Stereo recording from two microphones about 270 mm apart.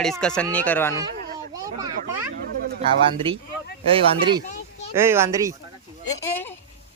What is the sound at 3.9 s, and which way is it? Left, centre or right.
Speech, centre.